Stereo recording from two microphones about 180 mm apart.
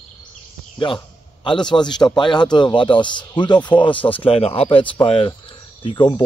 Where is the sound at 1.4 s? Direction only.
25° left (ahead or behind).